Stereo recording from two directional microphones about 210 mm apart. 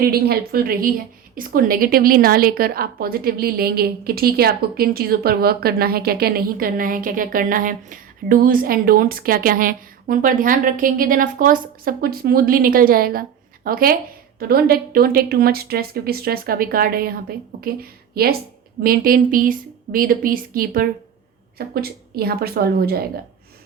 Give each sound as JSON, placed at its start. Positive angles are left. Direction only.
{"t": 0.0, "sound": "a woman's voice", "side_deg": -45}